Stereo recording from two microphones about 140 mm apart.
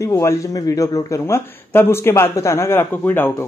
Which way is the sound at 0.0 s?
20° left (ahead or behind).